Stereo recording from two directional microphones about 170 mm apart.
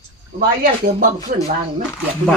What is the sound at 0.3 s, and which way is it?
Speech, 50° right (ahead or behind).